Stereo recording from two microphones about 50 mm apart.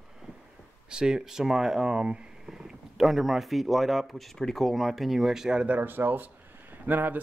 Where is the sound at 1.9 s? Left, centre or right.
Right.